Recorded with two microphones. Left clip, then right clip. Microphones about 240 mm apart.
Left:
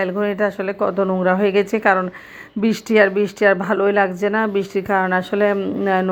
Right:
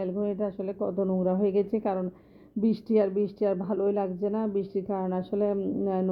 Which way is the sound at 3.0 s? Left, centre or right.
Left.